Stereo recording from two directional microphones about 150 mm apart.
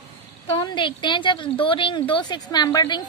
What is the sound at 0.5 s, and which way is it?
A woman's voice, 35° left (ahead or behind).